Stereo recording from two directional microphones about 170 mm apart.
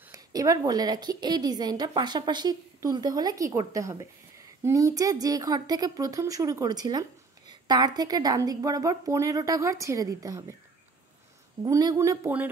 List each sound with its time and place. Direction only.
0.1 s a woman's voice: 20° right (ahead or behind)
11.6 s a woman's voice: 20° right (ahead or behind)